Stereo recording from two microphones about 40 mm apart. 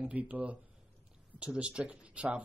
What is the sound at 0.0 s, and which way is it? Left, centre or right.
Speech, right.